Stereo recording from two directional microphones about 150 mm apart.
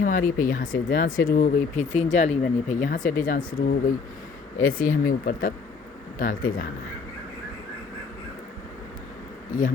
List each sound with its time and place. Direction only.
0.0 s speech: 65° left (ahead or behind)
1.8 s speech: 55° left (ahead or behind)